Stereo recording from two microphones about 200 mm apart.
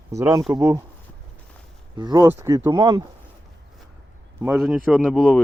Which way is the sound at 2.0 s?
15° right (ahead or behind).